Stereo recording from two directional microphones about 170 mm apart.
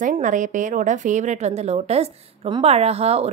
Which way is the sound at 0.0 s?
50° right (ahead or behind).